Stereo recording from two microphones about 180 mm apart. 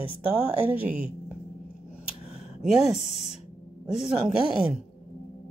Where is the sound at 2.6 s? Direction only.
Centre (ahead or behind).